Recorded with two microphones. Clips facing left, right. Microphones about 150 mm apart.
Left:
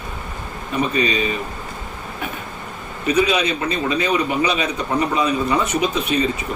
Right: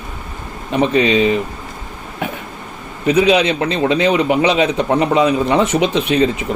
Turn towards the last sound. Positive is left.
turn(degrees=-90)